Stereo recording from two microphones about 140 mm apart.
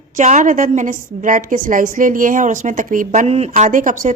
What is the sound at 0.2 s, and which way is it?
Speech, 60° right (ahead or behind).